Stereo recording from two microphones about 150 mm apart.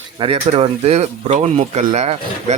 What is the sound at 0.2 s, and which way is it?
Speech, 40° right (ahead or behind).